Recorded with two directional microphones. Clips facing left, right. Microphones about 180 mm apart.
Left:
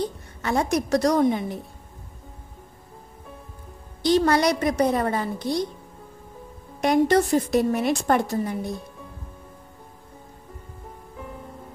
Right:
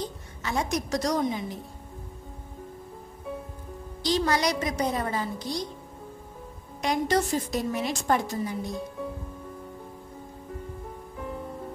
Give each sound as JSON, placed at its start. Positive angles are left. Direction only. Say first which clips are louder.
{"t": 0.4, "sound": "a woman's voice", "louder": "left 6 dB", "side_deg": 55}
{"t": 4.0, "sound": "a woman's voice", "louder": "left 6 dB", "side_deg": 55}
{"t": 6.8, "sound": "a woman's voice", "louder": "left 6 dB", "side_deg": 60}